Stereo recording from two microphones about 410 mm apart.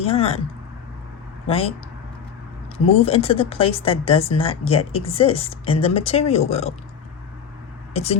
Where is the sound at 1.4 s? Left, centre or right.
Centre.